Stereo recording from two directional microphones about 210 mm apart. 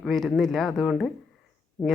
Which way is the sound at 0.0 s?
Centre (ahead or behind).